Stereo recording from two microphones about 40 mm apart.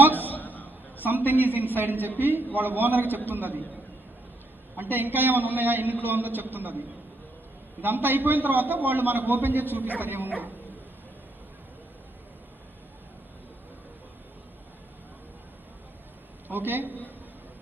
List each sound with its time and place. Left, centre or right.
0.1 s a sound: left
1.0 s a man's voice: right
4.8 s a man's voice: right
16.5 s a man's voice: right